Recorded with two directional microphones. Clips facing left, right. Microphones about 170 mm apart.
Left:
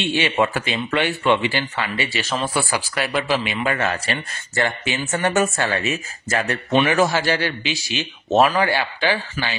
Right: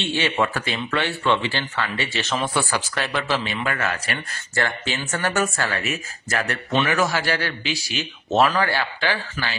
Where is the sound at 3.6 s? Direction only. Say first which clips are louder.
Left 4 dB; 30° left (ahead or behind).